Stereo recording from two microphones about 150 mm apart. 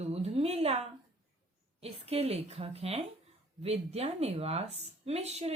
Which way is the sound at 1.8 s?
40° right (ahead or behind).